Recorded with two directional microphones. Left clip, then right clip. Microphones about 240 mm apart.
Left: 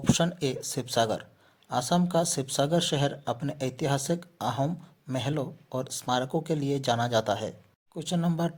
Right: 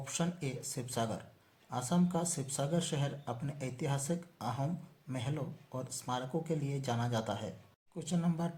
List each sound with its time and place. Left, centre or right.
0.0 s speech: left